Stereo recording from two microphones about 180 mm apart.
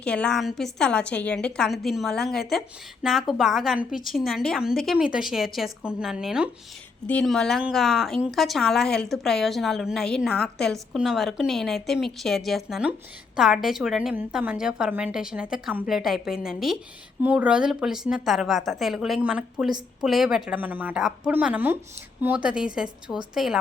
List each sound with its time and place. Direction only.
0.0 s a woman's voice: 5° left (ahead or behind)